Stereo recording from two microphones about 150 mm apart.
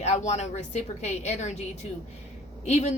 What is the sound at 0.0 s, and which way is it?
Speech, 50° left (ahead or behind).